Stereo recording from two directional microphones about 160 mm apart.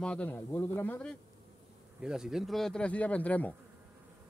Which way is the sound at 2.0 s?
5° right (ahead or behind).